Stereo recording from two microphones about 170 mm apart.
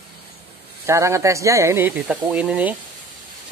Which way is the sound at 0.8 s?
15° right (ahead or behind).